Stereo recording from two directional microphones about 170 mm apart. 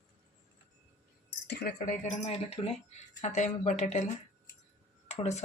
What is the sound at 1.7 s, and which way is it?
Speech, 45° left (ahead or behind).